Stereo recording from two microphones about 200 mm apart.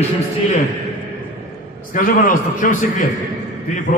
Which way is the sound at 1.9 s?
40° left (ahead or behind).